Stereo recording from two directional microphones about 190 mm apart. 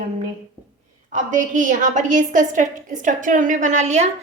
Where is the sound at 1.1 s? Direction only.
45° right (ahead or behind).